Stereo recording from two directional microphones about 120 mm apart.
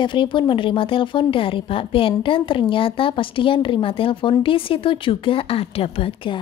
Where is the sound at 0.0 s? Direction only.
45° left (ahead or behind).